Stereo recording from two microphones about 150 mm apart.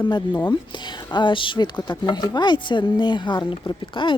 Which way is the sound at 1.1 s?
30° left (ahead or behind).